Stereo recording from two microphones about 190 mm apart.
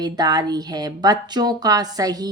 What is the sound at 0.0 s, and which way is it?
Speech, 20° right (ahead or behind).